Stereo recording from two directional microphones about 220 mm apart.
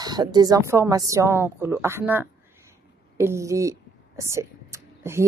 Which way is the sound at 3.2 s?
15° right (ahead or behind).